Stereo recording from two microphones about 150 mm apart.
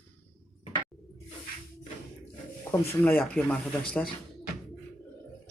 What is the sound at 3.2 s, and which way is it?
Speech, 10° left (ahead or behind).